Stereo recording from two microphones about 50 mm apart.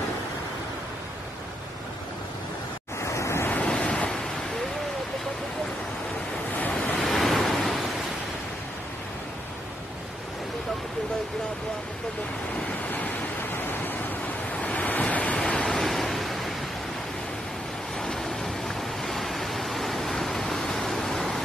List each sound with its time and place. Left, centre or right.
3.0 s waves: left
3.6 s waves: centre
6.7 s vehicle: left
7.0 s vehicle: centre
12.8 s waves: left
14.6 s waves: left
15.3 s waves: centre
18.0 s a sound: centre